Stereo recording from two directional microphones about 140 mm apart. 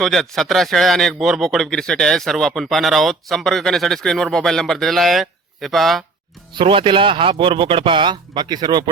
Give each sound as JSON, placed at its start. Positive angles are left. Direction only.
{"t": 0.0, "sound": "speech", "side_deg": 0}
{"t": 6.6, "sound": "speech", "side_deg": -35}